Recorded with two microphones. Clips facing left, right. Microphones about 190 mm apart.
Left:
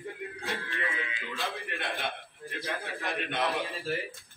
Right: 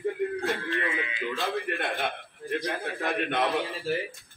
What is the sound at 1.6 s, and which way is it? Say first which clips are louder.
A man's voice: right 5 dB; 55° right (ahead or behind).